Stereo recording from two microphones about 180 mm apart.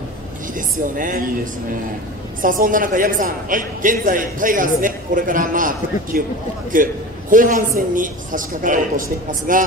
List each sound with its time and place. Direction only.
0.6 s a man's voice: 50° right (ahead or behind)